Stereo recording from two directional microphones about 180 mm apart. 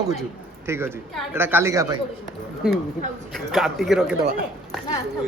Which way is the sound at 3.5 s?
Centre (ahead or behind).